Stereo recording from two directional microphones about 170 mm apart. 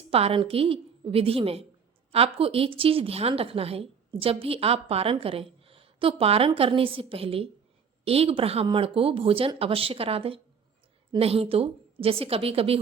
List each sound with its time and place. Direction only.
0.1 s a woman's voice: 35° right (ahead or behind)